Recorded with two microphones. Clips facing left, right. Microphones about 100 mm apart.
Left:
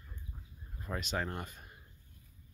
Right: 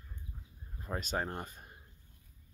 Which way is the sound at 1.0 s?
35° right (ahead or behind).